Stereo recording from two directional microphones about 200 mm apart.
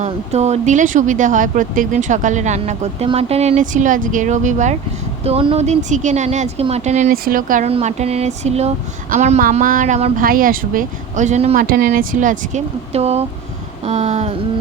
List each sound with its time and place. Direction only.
0.0 s speech: 35° right (ahead or behind)
11.6 s speech: 45° right (ahead or behind)